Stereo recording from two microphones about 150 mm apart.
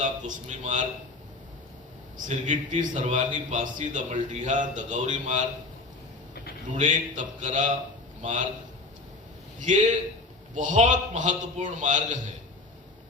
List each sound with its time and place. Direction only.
0.0 s speech: 55° right (ahead or behind)
2.1 s speech: 55° right (ahead or behind)
6.7 s a sound: 50° right (ahead or behind)
8.2 s speech: 55° right (ahead or behind)
9.6 s speech: 55° right (ahead or behind)